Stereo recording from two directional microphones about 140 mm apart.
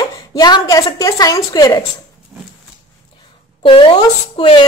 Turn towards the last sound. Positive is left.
turn(degrees=35)  # may be behind; listen again after turning